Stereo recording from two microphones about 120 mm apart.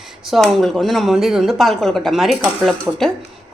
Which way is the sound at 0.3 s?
Centre (ahead or behind).